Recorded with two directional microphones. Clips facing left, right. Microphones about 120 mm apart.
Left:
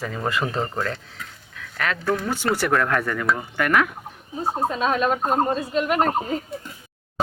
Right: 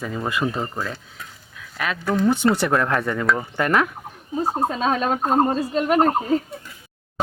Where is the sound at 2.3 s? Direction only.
20° right (ahead or behind).